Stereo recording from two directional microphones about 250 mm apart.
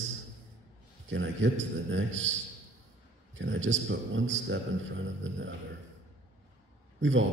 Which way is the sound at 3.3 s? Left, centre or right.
Right.